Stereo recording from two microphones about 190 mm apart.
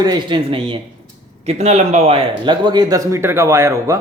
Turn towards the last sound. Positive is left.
turn(degrees=-15)  # may be behind; listen again after turning